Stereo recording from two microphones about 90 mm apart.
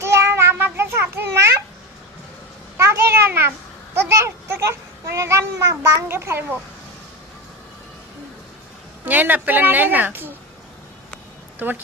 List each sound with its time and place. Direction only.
0.0 s child singing: 30° right (ahead or behind)
2.7 s a sound: 30° right (ahead or behind)
9.0 s speech: 20° right (ahead or behind)
11.6 s speech: 20° right (ahead or behind)